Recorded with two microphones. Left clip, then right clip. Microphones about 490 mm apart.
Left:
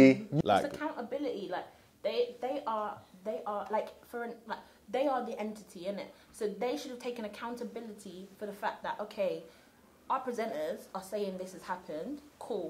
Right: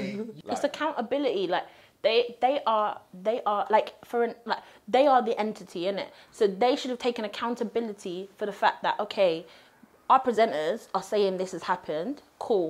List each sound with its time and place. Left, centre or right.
0.7 s a woman's voice: right